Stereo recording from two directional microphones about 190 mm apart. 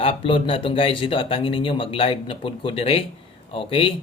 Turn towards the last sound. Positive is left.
turn(degrees=30)  # may be behind; listen again after turning